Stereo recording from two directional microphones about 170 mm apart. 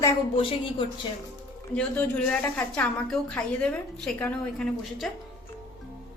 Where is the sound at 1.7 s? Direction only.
5° left (ahead or behind).